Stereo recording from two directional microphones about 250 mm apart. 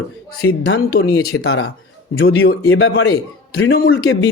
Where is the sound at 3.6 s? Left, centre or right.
Left.